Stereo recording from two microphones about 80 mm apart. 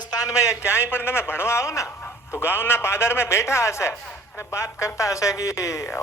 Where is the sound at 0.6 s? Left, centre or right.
Left.